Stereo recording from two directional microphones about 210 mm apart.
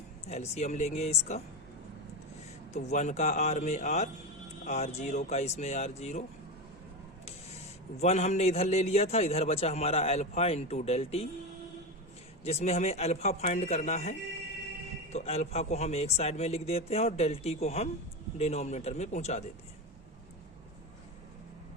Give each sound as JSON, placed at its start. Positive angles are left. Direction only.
{"t": 0.3, "sound": "a man's voice", "side_deg": 30}
{"t": 2.7, "sound": "a man's voice", "side_deg": 35}
{"t": 8.0, "sound": "a man's voice", "side_deg": 30}
{"t": 12.5, "sound": "a man's voice", "side_deg": 30}